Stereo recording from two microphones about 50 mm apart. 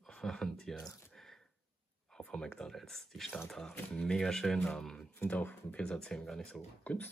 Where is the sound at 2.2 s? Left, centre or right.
Centre.